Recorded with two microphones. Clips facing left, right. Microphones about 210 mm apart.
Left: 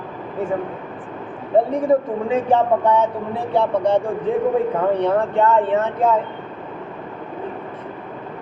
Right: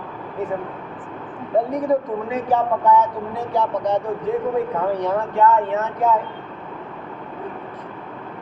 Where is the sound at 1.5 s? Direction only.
30° left (ahead or behind).